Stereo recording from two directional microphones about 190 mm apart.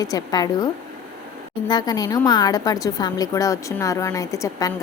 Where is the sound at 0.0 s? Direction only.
20° left (ahead or behind).